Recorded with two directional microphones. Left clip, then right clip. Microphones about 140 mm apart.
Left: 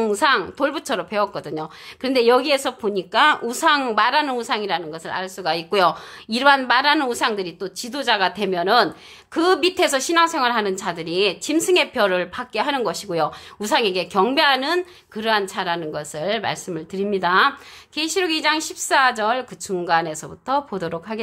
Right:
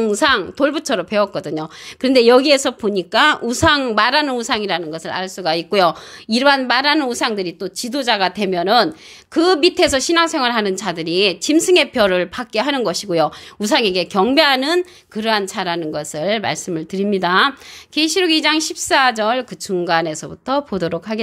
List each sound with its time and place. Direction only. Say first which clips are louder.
0.0 s a woman's voice: right 3 dB; 30° right (ahead or behind)